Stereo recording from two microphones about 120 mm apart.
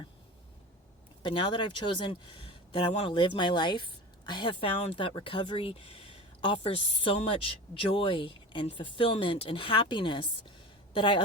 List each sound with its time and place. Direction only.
1.2 s a woman's voice: 45° left (ahead or behind)